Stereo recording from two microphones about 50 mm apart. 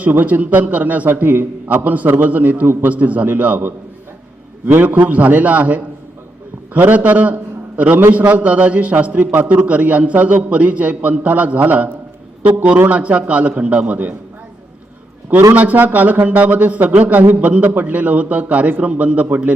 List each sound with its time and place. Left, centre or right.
0.0 s a man's voice: right
4.6 s a man's voice: right
12.9 s a man's voice: right
15.5 s a man's voice: right